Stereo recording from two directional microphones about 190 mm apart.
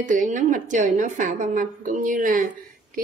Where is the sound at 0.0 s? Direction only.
45° right (ahead or behind).